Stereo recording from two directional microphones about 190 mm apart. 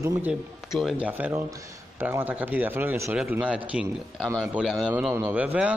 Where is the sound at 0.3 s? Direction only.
Centre (ahead or behind).